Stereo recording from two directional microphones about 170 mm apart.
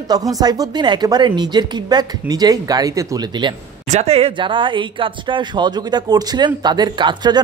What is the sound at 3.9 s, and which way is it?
Speech, 35° right (ahead or behind).